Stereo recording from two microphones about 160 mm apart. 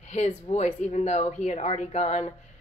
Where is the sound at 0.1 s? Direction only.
45° left (ahead or behind).